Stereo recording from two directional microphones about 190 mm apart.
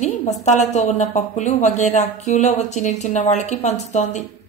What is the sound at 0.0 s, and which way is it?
A woman's voice, 40° left (ahead or behind).